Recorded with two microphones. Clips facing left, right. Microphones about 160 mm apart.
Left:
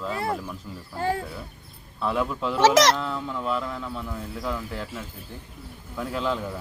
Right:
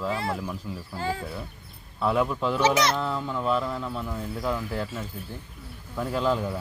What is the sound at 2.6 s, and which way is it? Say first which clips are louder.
Speech: left 6 dB; 90° left.